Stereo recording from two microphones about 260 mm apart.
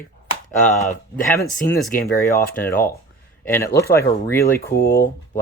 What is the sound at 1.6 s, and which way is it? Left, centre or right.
Speech, centre.